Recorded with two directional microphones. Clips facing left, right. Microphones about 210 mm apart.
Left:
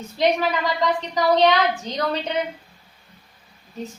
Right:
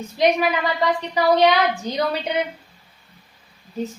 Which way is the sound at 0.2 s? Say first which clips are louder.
Right 2 dB; 10° right (ahead or behind).